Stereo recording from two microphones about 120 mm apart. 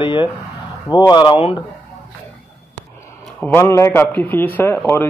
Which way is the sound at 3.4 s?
20° left (ahead or behind).